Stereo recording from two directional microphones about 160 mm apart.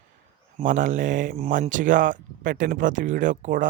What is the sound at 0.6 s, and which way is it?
Speech, 55° right (ahead or behind).